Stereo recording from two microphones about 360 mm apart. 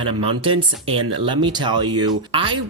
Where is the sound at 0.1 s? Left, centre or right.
Centre.